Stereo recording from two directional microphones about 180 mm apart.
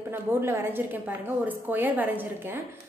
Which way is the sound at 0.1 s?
10° right (ahead or behind).